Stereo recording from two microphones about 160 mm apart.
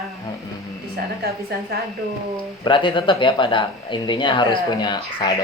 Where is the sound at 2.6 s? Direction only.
30° left (ahead or behind).